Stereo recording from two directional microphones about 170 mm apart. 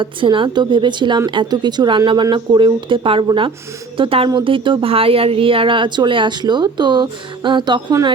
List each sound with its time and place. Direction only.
0.0 s a woman's voice: 30° right (ahead or behind)